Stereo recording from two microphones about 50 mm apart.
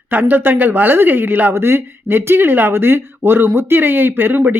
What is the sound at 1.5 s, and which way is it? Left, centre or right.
Speech, right.